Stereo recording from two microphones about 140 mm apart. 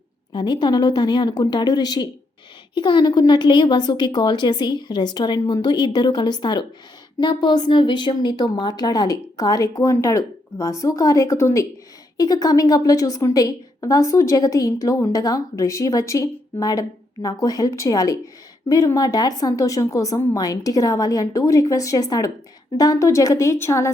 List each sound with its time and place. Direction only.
0.3 s a woman's voice: 35° left (ahead or behind)